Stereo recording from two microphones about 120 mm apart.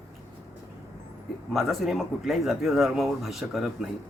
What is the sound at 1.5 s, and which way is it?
Speech, centre (ahead or behind).